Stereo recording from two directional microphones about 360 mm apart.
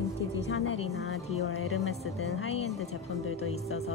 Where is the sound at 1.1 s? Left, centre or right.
Left.